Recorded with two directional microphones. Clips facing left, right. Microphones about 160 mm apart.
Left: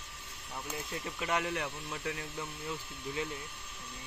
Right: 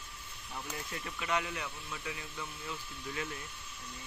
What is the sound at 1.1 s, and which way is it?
Speech, 50° left (ahead or behind).